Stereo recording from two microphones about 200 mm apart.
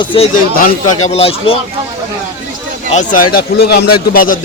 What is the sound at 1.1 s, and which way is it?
Speech, 30° left (ahead or behind).